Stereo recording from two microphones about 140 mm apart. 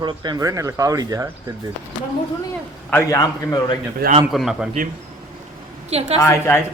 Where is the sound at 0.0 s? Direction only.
30° right (ahead or behind).